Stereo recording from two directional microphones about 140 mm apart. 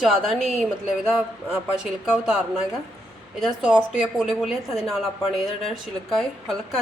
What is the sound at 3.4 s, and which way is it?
A woman's voice, 5° right (ahead or behind).